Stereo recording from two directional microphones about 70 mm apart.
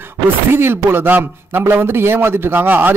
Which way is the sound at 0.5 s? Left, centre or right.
Right.